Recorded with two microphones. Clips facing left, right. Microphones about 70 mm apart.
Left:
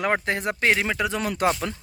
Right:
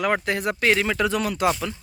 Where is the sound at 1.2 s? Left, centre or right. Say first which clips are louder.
Right 1 dB; left.